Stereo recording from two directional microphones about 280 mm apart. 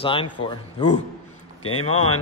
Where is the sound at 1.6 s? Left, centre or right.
Left.